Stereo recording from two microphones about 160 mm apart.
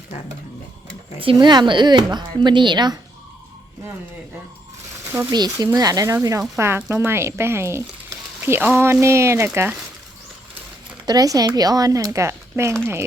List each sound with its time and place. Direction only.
1.2 s a woman's voice: 30° right (ahead or behind)
5.3 s a woman's voice: 25° right (ahead or behind)
11.0 s a woman's voice: 25° right (ahead or behind)